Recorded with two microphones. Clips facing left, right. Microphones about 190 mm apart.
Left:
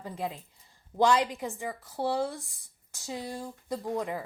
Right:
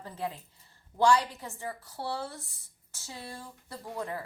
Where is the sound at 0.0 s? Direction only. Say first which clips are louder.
Left 2 dB; 15° left (ahead or behind).